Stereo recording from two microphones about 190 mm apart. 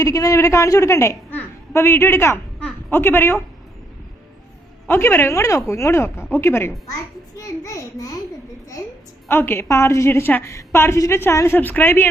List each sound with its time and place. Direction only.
0.0 s a woman's voice: 20° left (ahead or behind)
4.9 s a woman's voice: 10° left (ahead or behind)
9.3 s a woman's voice: 10° left (ahead or behind)